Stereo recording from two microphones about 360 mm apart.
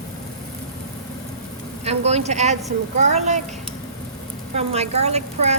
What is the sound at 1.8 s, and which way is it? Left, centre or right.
Speech, centre.